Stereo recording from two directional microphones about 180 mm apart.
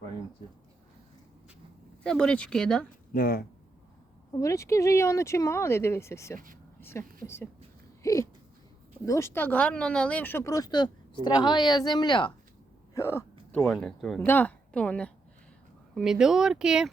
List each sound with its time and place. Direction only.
2.0 s speech: 5° left (ahead or behind)
3.1 s speech: 55° left (ahead or behind)
4.4 s speech: 15° left (ahead or behind)
6.7 s a sound: 15° left (ahead or behind)
7.2 s speech: 10° left (ahead or behind)
8.0 s a sound: 15° left (ahead or behind)
9.0 s speech: 15° left (ahead or behind)
12.9 s a sound: 15° left (ahead or behind)
13.7 s speech: centre (ahead or behind)
14.2 s a woman's voice: 10° left (ahead or behind)